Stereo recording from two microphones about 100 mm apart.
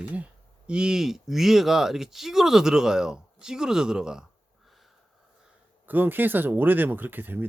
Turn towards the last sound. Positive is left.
turn(degrees=-20)  # may be behind; listen again after turning